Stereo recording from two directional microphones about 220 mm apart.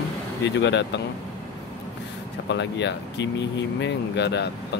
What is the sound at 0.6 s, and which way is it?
Speech, 55° left (ahead or behind).